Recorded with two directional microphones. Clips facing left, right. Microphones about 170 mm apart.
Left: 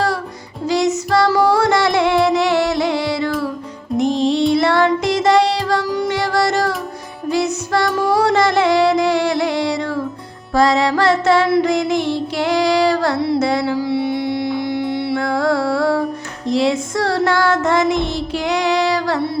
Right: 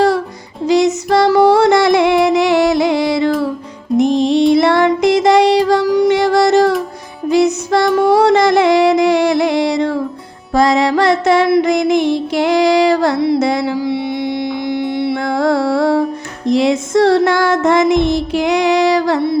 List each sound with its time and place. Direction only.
0.7 s music: 20° right (ahead or behind)